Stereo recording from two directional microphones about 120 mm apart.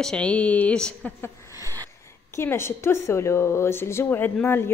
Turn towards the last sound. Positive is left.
turn(degrees=15)  # may be behind; listen again after turning